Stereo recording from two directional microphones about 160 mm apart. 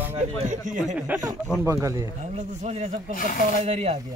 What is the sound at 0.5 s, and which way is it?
Speech, 50° right (ahead or behind).